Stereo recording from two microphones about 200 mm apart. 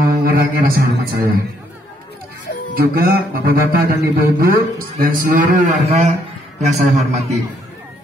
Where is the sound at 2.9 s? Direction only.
50° right (ahead or behind).